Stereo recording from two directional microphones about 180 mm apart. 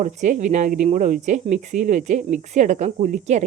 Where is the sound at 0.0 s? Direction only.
40° right (ahead or behind).